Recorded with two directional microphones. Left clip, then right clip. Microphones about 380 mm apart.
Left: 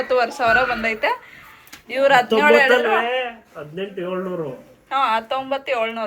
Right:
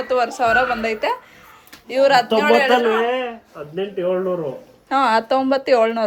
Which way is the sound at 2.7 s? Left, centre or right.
Centre.